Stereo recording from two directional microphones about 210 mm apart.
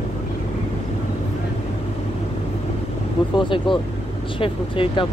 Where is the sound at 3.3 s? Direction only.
25° left (ahead or behind).